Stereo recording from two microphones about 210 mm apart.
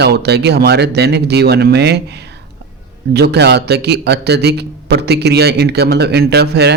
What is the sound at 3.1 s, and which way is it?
A man's voice, 50° right (ahead or behind).